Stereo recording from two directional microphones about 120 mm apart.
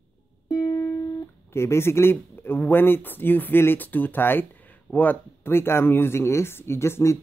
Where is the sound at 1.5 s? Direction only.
20° left (ahead or behind).